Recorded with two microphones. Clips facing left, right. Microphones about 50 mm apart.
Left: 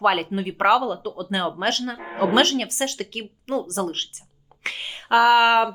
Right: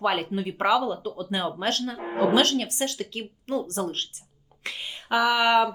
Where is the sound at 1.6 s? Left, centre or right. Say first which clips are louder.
Left 3 dB; left.